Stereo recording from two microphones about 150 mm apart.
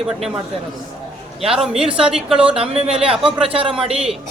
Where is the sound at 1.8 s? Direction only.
35° right (ahead or behind).